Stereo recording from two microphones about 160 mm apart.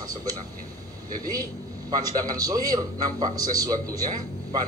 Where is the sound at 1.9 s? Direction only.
25° right (ahead or behind).